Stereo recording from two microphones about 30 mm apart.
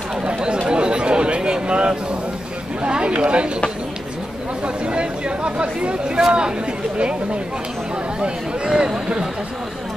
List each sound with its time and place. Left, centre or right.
0.2 s chatter: right
0.7 s a sound: right
2.9 s speech: right
4.6 s speech: right
6.0 s speech: right
8.7 s speech: right